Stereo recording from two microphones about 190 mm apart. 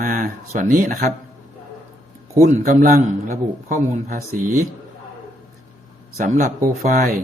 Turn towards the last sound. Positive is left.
turn(degrees=-45)  # may be behind; listen again after turning